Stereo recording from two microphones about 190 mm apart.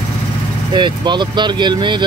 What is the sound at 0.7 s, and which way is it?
Speech, 25° right (ahead or behind).